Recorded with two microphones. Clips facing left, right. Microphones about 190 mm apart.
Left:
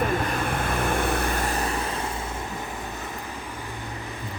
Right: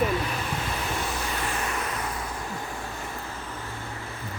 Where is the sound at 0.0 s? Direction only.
50° left (ahead or behind); by 2.0 s 30° left (ahead or behind).